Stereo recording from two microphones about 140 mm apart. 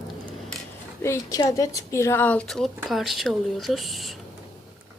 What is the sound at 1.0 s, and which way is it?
Speech, 20° left (ahead or behind).